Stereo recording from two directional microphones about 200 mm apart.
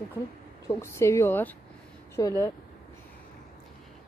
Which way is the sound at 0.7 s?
15° left (ahead or behind).